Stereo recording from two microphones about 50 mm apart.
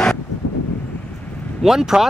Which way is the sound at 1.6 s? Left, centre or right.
Centre.